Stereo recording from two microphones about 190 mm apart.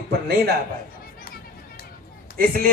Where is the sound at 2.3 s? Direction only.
50° right (ahead or behind).